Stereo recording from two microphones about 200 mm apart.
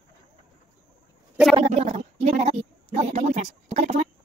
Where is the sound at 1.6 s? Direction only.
30° right (ahead or behind).